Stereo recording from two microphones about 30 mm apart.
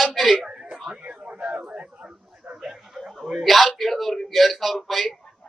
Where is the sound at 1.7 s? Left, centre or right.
Right.